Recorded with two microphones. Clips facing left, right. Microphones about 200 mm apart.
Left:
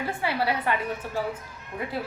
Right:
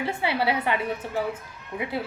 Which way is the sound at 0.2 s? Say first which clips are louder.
Right 1 dB; 25° right (ahead or behind).